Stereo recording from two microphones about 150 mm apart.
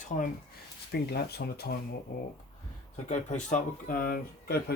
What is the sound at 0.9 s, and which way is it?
Speech, 90° left.